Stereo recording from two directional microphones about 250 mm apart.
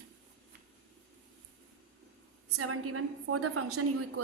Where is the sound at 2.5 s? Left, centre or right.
Right.